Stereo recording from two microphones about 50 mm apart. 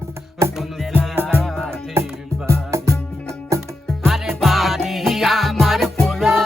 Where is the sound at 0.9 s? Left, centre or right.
Right.